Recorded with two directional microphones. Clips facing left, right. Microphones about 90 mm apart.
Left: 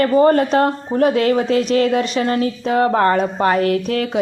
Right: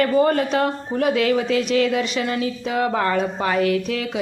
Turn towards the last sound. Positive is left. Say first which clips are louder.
# left 3 dB
turn(degrees=45)  # may be behind; listen again after turning